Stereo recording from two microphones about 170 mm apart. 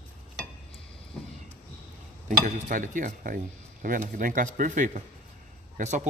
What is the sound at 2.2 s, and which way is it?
Speech, 50° right (ahead or behind).